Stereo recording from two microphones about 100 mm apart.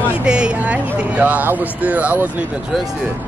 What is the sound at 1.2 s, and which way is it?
Speech, 15° right (ahead or behind).